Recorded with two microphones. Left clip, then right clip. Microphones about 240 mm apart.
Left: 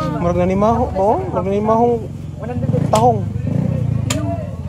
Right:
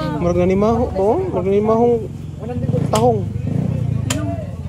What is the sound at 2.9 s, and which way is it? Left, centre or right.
Speech, left.